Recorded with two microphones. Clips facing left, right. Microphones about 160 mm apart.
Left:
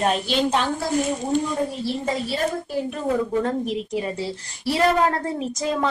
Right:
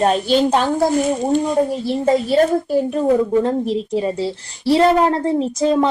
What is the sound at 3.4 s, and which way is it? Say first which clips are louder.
A woman's voice: right 5 dB; 30° right (ahead or behind).